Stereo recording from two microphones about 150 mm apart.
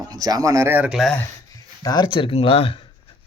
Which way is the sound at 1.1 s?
20° left (ahead or behind).